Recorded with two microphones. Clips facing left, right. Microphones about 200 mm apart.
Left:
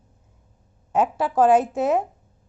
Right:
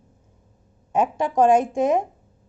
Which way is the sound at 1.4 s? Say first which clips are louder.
Even; 5° left (ahead or behind).